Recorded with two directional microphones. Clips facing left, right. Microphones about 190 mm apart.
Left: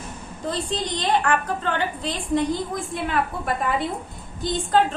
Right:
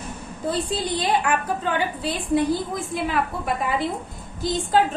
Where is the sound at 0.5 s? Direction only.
10° right (ahead or behind).